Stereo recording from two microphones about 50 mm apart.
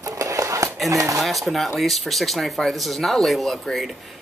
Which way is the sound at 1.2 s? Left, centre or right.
Centre.